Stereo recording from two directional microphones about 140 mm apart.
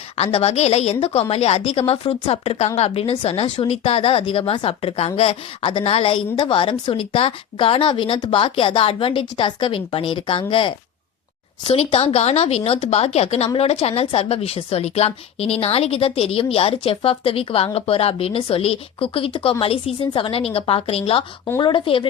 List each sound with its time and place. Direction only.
0.2 s a woman's voice: 45° left (ahead or behind)